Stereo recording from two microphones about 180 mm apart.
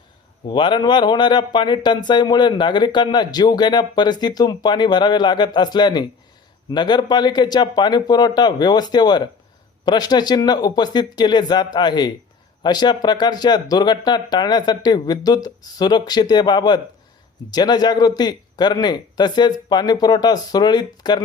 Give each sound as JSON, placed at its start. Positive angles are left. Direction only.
{"t": 0.4, "sound": "speech", "side_deg": 25}